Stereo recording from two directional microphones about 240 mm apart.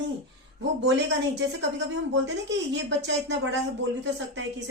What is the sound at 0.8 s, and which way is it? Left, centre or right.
Speech, right.